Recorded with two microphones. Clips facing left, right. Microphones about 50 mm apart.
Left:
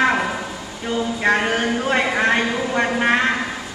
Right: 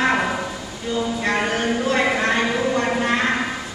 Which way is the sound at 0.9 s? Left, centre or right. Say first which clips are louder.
Left 3 dB; left.